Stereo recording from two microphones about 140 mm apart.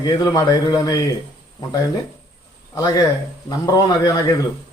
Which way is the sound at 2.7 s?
25° left (ahead or behind).